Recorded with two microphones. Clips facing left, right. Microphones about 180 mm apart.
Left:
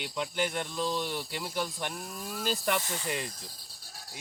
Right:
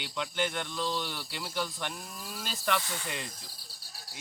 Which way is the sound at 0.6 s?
35° left (ahead or behind).